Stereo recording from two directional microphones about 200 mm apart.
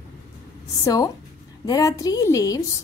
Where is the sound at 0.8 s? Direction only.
15° left (ahead or behind).